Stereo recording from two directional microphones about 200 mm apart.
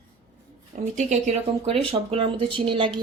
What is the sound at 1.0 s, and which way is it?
Speech, 35° right (ahead or behind).